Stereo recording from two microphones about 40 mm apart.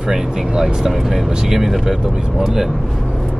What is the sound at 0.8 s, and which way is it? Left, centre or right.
Speech, centre.